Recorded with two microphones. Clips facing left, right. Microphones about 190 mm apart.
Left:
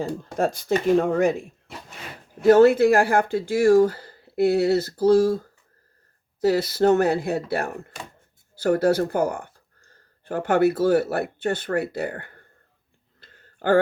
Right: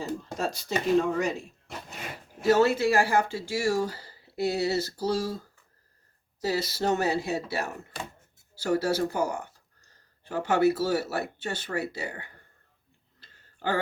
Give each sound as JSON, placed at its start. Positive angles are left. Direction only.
{"t": 0.3, "sound": "speech", "side_deg": 55}
{"t": 6.4, "sound": "speech", "side_deg": 55}
{"t": 13.1, "sound": "a sound", "side_deg": 55}